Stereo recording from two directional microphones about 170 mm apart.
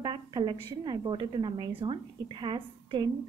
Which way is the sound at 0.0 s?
30° right (ahead or behind).